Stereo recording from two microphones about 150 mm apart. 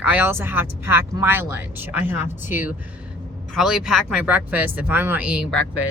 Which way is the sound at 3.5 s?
5° right (ahead or behind).